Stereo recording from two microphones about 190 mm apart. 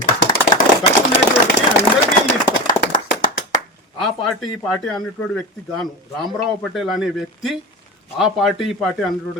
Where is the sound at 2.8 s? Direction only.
45° left (ahead or behind).